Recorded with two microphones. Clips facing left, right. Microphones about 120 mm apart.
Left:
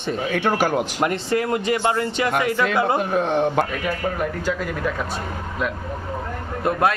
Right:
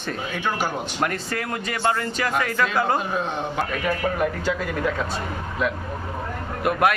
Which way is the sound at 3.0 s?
60° left (ahead or behind).